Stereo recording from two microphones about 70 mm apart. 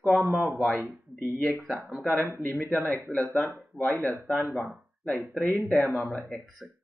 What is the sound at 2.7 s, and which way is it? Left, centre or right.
Speech, centre.